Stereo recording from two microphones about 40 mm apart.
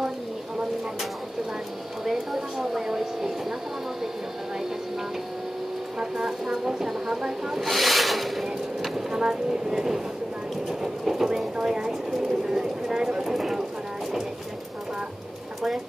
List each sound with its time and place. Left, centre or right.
2.0 s a sound: centre
5.9 s vehicle: centre
7.6 s rub: centre
9.1 s speech: centre
10.8 s train: centre
11.6 s bird: centre
13.0 s a sound: centre